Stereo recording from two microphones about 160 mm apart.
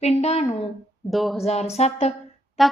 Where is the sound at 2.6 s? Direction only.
Centre (ahead or behind).